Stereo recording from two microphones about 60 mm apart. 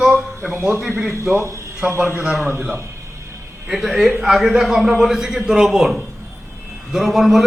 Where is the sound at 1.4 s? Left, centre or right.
Right.